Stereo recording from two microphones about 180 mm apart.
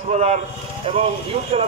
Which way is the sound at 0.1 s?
40° right (ahead or behind).